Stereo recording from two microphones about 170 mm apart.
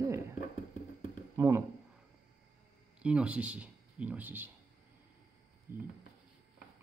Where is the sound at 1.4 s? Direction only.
15° right (ahead or behind).